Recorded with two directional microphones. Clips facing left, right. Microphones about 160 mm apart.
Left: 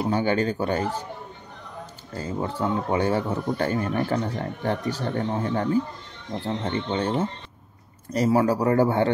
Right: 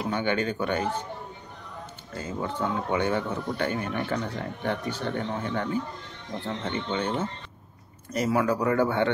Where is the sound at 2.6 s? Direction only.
30° left (ahead or behind).